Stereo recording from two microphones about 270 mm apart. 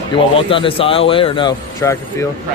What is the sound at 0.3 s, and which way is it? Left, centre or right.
Speech, centre.